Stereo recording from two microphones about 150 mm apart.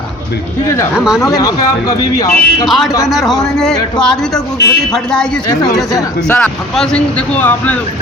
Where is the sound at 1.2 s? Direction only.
20° left (ahead or behind).